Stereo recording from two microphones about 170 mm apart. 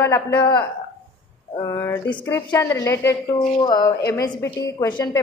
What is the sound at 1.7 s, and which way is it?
A woman's voice, 15° left (ahead or behind).